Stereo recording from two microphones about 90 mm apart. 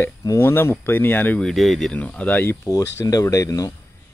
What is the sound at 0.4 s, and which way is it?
Speech, 30° left (ahead or behind).